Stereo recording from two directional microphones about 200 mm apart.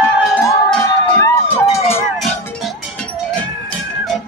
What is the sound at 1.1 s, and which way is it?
Emergency vehicle, 10° left (ahead or behind).